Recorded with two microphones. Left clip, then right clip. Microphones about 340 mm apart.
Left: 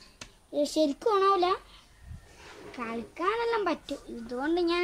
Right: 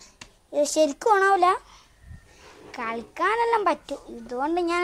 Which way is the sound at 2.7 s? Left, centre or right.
Right.